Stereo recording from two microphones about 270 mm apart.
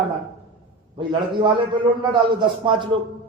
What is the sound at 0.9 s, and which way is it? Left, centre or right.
A man's voice, centre.